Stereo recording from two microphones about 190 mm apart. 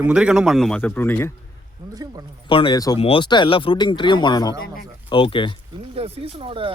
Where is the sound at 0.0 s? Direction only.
5° right (ahead or behind); by 1.3 s 10° left (ahead or behind).